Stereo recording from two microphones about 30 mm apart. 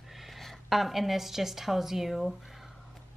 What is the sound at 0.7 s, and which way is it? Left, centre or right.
A woman's voice, centre.